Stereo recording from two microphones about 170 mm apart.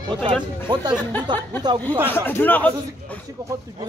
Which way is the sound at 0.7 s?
25° right (ahead or behind).